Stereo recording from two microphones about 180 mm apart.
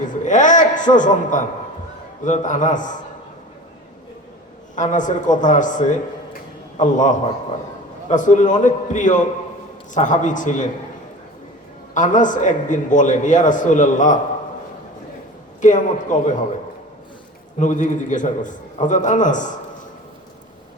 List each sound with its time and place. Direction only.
0.1 s a sound: 45° left (ahead or behind)
2.2 s a man's voice: 45° left (ahead or behind)
4.7 s a man's voice: 45° left (ahead or behind)
11.9 s a man's voice: 45° left (ahead or behind)
15.6 s a man's voice: 45° left (ahead or behind)
17.6 s a man's voice: 45° left (ahead or behind)